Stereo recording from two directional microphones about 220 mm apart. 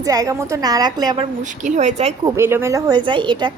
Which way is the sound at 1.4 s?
35° right (ahead or behind).